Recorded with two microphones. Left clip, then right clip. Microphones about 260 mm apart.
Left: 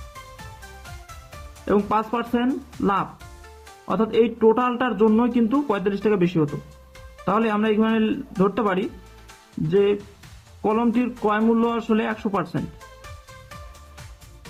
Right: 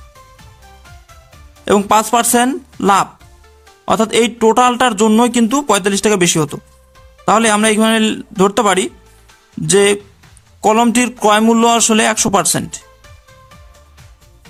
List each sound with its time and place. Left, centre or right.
1.6 s speech: right